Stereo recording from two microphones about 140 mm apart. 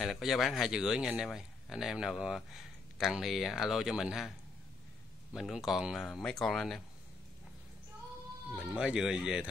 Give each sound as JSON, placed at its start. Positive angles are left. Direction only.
{"t": 0.0, "sound": "speech", "side_deg": 0}
{"t": 5.3, "sound": "speech", "side_deg": -5}
{"t": 8.5, "sound": "speech", "side_deg": -10}